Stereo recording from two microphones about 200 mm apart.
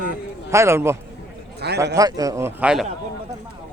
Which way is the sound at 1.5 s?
55° right (ahead or behind).